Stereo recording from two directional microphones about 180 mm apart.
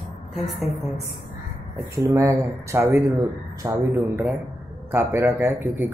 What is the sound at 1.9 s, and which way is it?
A man's voice, 15° right (ahead or behind).